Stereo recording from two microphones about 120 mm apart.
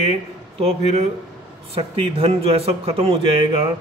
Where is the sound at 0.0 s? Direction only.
60° right (ahead or behind).